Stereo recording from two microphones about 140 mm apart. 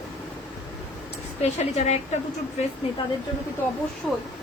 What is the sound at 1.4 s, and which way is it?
Speech, 50° left (ahead or behind).